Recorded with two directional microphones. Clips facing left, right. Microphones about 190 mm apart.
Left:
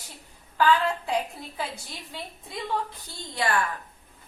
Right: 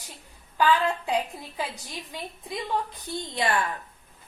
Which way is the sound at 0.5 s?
20° right (ahead or behind).